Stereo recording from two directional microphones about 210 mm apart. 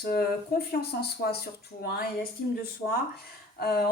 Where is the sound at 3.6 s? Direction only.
50° left (ahead or behind).